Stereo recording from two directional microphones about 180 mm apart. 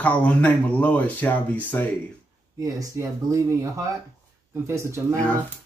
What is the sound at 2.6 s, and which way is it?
Speech, 20° right (ahead or behind).